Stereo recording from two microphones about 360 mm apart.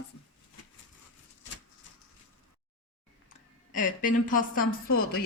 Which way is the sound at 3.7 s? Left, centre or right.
Left.